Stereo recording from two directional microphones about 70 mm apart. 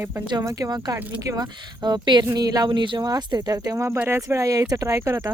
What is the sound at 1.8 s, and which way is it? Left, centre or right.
Speech, right.